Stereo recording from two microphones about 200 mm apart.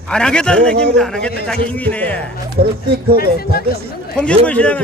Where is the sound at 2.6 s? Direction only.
50° right (ahead or behind).